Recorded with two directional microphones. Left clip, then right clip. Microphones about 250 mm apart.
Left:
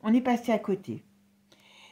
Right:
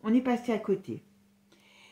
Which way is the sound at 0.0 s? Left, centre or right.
Left.